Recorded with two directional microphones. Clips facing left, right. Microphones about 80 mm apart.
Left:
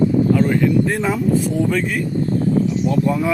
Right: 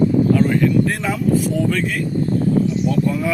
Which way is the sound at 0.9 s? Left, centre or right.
Left.